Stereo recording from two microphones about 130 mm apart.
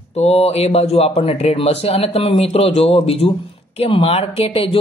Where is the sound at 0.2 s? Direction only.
55° left (ahead or behind).